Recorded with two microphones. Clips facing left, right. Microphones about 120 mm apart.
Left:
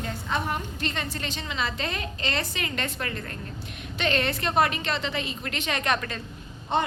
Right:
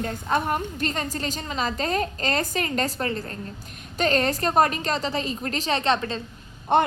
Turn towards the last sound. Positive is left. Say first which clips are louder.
# right 6 dB
turn(degrees=-55)  # may be behind; listen again after turning